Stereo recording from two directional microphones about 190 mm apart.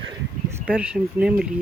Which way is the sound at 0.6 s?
5° right (ahead or behind).